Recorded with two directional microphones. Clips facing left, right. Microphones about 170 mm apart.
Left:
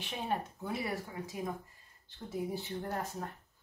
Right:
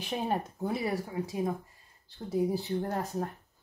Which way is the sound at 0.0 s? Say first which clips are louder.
Right 5 dB; 40° right (ahead or behind).